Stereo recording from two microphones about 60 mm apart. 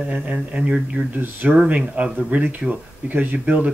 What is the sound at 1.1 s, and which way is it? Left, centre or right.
Speech, right.